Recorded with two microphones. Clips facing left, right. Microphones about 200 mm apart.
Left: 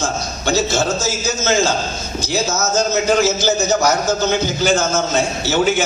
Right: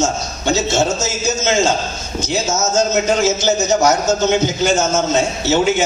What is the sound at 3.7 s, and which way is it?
A man's voice, 25° right (ahead or behind).